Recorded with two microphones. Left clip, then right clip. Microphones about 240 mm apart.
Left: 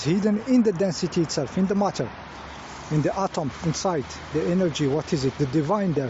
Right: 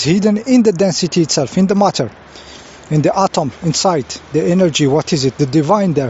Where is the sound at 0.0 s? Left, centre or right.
Right.